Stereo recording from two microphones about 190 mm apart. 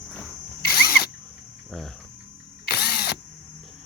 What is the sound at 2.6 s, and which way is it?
Drill, 55° left (ahead or behind).